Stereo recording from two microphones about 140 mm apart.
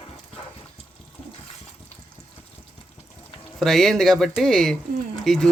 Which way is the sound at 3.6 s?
Centre (ahead or behind).